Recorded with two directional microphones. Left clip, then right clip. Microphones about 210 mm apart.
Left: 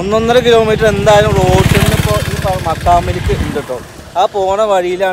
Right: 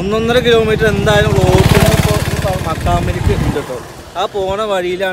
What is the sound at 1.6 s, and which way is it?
Vehicle, 45° right (ahead or behind).